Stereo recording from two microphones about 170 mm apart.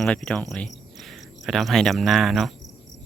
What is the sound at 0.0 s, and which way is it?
Cricket, 5° left (ahead or behind).